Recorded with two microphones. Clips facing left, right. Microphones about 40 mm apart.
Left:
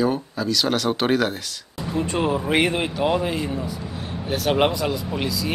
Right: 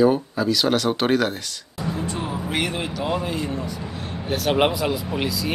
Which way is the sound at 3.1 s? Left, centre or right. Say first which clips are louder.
Left 2 dB; centre.